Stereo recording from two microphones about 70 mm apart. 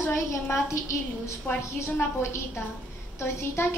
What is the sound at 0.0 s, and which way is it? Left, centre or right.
A woman's voice, left.